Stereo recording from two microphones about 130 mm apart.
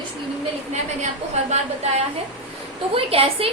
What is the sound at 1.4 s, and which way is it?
Speech, 60° right (ahead or behind).